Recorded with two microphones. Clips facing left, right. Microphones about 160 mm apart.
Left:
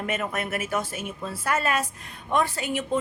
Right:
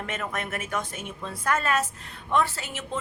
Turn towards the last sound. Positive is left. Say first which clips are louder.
# left 7 dB
turn(degrees=15)  # may be behind; listen again after turning